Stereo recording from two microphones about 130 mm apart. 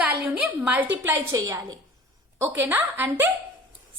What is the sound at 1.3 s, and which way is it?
A woman's voice, 25° right (ahead or behind).